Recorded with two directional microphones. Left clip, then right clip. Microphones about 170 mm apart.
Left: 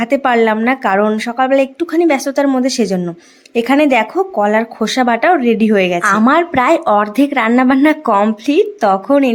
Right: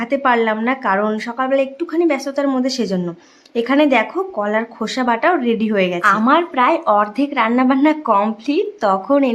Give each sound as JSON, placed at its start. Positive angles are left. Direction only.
{"t": 0.0, "sound": "speech", "side_deg": 25}